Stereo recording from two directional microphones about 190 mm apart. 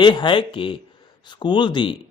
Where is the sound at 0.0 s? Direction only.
25° left (ahead or behind).